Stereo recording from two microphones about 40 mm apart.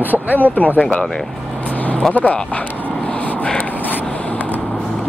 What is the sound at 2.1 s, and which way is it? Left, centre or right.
Speech, left.